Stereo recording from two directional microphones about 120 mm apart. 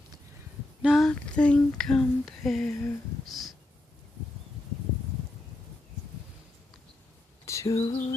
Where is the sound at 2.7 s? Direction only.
20° left (ahead or behind).